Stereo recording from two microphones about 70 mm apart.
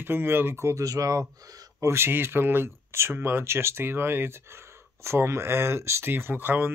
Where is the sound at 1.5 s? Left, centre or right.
Right.